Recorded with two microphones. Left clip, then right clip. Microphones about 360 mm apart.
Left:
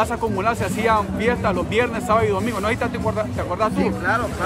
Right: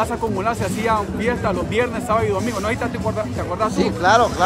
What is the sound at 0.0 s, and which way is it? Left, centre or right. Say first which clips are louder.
Speech: even; centre.